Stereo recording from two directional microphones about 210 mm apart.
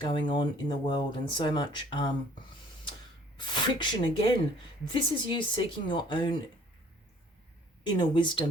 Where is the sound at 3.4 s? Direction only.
20° left (ahead or behind).